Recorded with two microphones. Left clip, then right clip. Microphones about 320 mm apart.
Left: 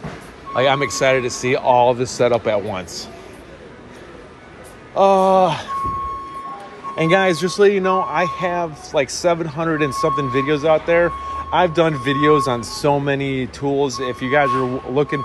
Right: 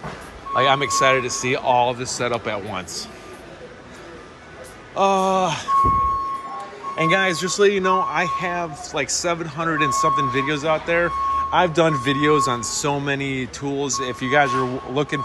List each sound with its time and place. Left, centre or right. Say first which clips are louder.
0.6 s speech: left 1 dB; centre
4.9 s a man's voice: left 5 dB; centre
7.0 s a man's voice: left 3 dB; centre
13.2 s speech: left 3 dB; right
13.6 s speech: left 6 dB; centre